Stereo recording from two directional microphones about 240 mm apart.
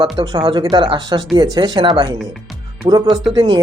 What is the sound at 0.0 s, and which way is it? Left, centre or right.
Speech, centre.